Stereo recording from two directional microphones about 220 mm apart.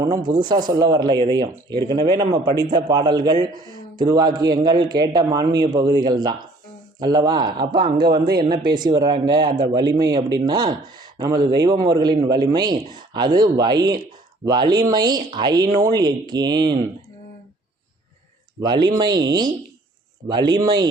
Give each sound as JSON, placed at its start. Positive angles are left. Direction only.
{"t": 0.3, "sound": "a man's voice", "side_deg": -20}
{"t": 7.9, "sound": "speech", "side_deg": -45}
{"t": 8.7, "sound": "a man's voice", "side_deg": -20}
{"t": 18.6, "sound": "a man's voice", "side_deg": -20}